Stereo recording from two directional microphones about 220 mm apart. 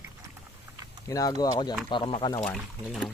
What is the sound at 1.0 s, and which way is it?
Speech, 15° left (ahead or behind).